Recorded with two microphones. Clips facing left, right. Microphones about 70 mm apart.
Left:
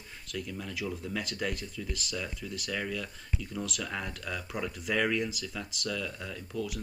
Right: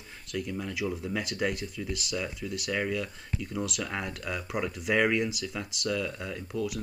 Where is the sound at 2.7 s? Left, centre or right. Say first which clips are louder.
Right 5 dB; right.